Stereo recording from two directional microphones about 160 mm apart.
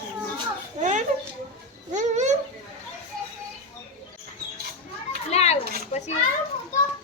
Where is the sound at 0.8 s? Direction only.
50° right (ahead or behind).